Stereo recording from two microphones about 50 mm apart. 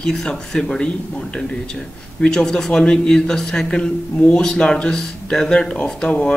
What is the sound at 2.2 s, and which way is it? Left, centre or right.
Speech, centre.